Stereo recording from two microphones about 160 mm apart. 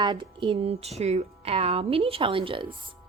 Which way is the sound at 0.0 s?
30° right (ahead or behind).